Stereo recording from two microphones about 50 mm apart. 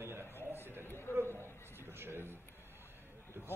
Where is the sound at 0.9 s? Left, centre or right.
Left.